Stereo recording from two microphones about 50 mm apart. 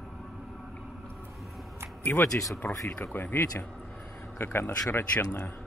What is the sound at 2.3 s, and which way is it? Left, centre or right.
Speech, left.